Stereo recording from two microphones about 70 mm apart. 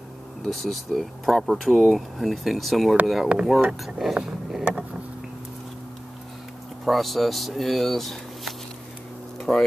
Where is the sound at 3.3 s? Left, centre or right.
Centre.